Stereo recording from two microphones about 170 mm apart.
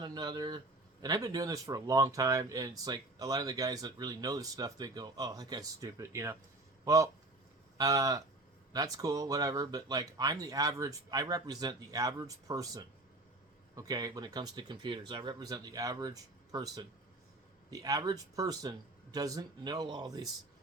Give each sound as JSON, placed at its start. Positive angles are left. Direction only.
{"t": 0.0, "sound": "speech", "side_deg": -25}